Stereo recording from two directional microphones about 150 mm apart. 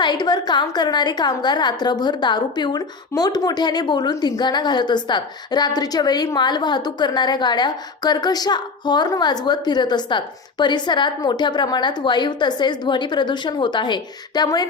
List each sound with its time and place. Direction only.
0.0 s a woman's voice: 30° left (ahead or behind)